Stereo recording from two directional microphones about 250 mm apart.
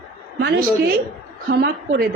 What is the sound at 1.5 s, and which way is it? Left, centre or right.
Speech, right.